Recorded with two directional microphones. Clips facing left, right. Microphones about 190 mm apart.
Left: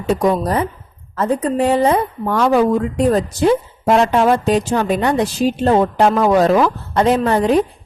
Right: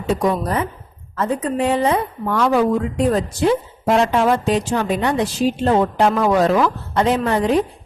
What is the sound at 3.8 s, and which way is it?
A woman's voice, 40° left (ahead or behind).